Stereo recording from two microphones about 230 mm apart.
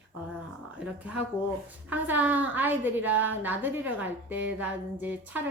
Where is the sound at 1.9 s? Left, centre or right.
Centre.